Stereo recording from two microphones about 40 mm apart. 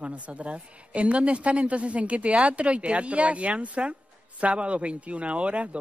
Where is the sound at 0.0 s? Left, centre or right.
Right.